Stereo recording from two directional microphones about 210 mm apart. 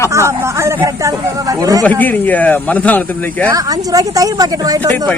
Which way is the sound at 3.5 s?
15° right (ahead or behind).